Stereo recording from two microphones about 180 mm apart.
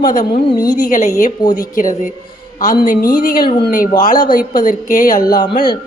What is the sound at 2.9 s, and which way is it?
Speech, 50° left (ahead or behind).